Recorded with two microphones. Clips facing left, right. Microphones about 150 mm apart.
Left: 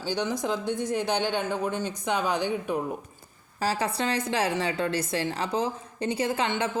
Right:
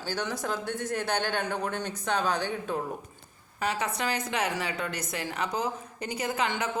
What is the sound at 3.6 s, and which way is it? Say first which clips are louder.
A woman's voice: left 3 dB; 30° left (ahead or behind).